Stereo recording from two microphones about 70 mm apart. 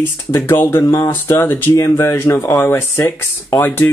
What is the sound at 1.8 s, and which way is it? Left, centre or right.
Speech, left.